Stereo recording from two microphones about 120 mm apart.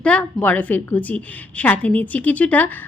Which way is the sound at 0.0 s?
10° left (ahead or behind).